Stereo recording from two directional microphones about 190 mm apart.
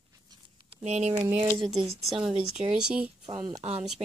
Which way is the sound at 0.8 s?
35° right (ahead or behind).